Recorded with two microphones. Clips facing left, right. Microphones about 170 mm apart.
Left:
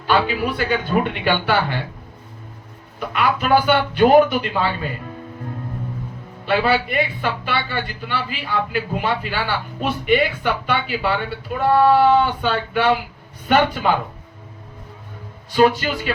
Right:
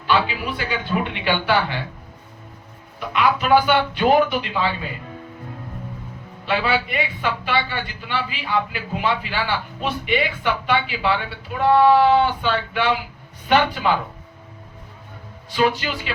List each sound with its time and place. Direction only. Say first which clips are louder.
0.1 s speech: left 2 dB; 45° left (ahead or behind)
3.1 s speech: right 1 dB; 45° left (ahead or behind)
6.4 s speech: left 3 dB; 45° left (ahead or behind)
15.5 s speech: left 4 dB; 45° left (ahead or behind)